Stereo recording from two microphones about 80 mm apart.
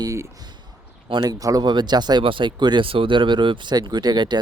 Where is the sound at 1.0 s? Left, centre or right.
Right.